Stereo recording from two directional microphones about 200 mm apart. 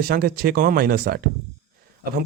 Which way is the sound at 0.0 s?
50° right (ahead or behind).